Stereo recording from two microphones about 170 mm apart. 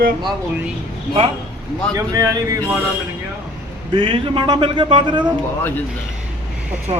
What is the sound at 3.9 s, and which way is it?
Speech, 30° right (ahead or behind).